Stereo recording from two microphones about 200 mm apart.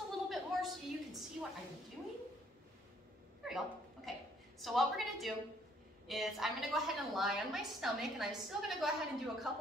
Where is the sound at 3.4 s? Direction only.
Centre (ahead or behind).